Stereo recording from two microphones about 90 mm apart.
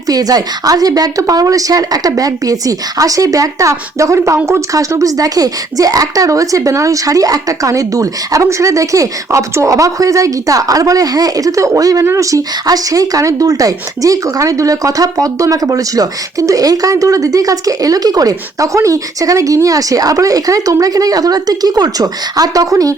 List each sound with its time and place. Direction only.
0.1 s speech: 45° right (ahead or behind)